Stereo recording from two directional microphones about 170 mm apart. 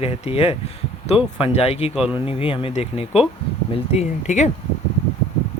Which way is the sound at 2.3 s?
35° left (ahead or behind).